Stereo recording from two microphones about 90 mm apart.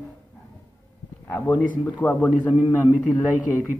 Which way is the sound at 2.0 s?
15° left (ahead or behind).